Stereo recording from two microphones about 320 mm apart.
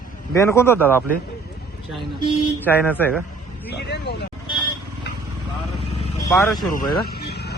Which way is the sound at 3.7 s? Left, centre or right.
Left.